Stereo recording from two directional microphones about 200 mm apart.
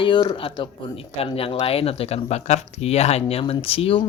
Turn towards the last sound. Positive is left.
turn(degrees=30)  # may be behind; listen again after turning